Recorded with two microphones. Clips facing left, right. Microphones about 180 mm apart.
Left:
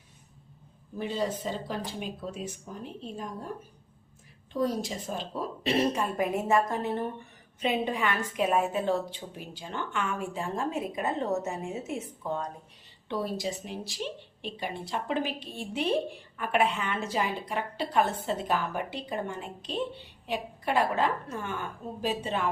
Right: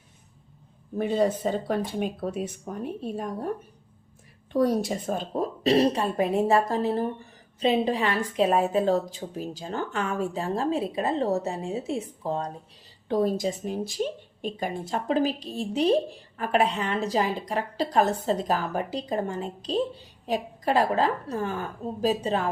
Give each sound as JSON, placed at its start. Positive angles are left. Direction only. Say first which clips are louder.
{"t": 0.9, "sound": "speech", "louder": "right 7 dB", "side_deg": -55}
{"t": 4.5, "sound": "speech", "louder": "right 6 dB", "side_deg": -65}
{"t": 13.1, "sound": "speech", "louder": "right 7 dB", "side_deg": -45}